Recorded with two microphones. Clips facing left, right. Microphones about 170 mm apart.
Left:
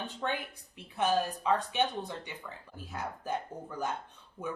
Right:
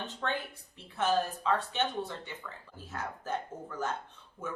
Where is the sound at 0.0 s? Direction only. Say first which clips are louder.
Even; 10° left (ahead or behind).